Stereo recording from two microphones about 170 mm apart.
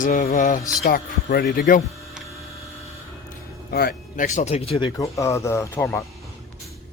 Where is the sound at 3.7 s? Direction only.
65° left (ahead or behind).